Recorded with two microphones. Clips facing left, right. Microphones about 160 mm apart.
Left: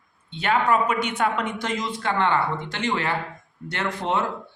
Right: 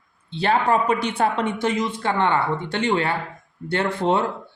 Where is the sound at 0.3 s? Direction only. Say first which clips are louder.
Right 2 dB; 35° right (ahead or behind).